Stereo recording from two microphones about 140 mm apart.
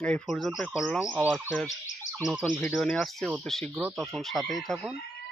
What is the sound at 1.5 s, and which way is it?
Fowl, 5° left (ahead or behind).